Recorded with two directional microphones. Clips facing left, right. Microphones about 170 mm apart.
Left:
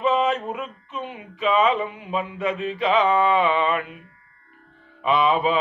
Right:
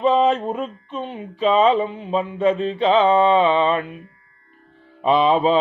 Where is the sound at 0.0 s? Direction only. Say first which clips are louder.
Right 4 dB; 35° right (ahead or behind).